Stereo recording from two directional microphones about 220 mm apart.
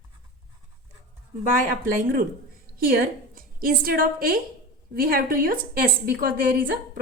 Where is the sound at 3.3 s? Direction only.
40° right (ahead or behind).